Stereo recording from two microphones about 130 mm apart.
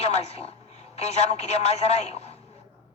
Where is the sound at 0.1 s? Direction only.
55° left (ahead or behind).